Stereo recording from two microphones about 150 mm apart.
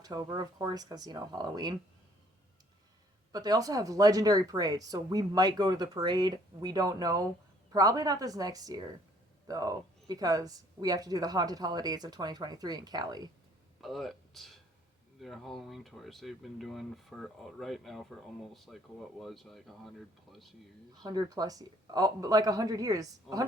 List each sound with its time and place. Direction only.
0.0 s speech: 25° right (ahead or behind)
3.3 s speech: 25° right (ahead or behind)
13.8 s speech: centre (ahead or behind)
21.0 s speech: 25° right (ahead or behind)
23.3 s speech: centre (ahead or behind)